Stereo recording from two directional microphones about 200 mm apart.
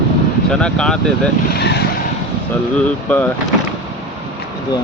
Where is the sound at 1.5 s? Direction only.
55° left (ahead or behind).